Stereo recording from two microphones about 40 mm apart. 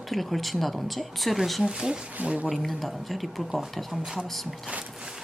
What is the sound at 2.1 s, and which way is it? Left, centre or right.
Speech, right.